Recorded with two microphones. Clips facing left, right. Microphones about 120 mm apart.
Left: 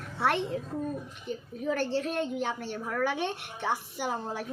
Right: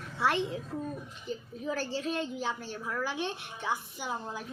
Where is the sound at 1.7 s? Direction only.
60° left (ahead or behind).